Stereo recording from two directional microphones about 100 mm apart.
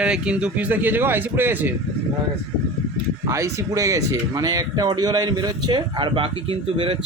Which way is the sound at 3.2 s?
30° right (ahead or behind).